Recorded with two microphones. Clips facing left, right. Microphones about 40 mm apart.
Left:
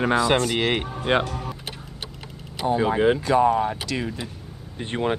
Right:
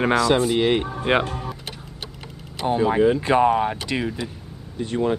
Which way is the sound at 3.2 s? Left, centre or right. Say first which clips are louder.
Right 1 dB; right.